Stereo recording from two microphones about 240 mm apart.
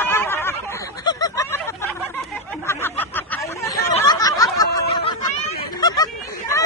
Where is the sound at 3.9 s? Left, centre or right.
Centre.